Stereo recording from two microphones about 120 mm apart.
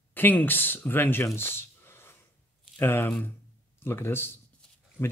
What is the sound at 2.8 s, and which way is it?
Speech, 20° left (ahead or behind).